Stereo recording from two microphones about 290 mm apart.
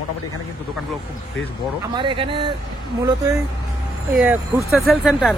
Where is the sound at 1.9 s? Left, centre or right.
Centre.